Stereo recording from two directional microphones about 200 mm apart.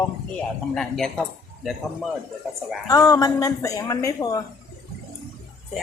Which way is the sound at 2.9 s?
15° left (ahead or behind).